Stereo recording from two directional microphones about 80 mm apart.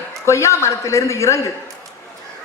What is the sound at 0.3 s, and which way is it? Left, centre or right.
A man's voice, left.